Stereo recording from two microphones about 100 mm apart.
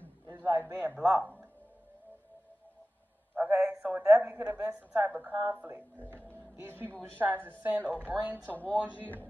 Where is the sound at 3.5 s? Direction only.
25° right (ahead or behind).